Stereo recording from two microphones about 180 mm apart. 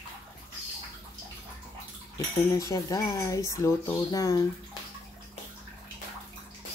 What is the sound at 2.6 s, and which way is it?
Speech, 20° left (ahead or behind).